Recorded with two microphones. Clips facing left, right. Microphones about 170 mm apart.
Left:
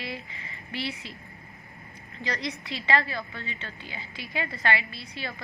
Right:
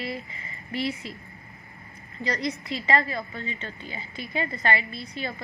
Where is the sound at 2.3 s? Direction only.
40° right (ahead or behind).